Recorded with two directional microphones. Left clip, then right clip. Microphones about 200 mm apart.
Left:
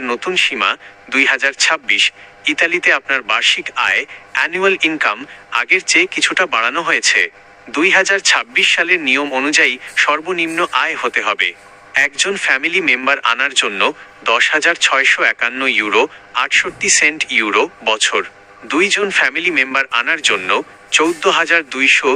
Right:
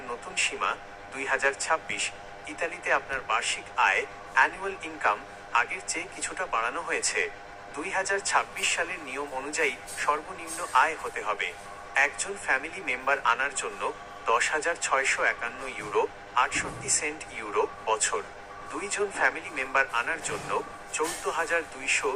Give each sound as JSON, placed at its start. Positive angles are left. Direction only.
{"t": 0.7, "sound": "speech", "side_deg": 40}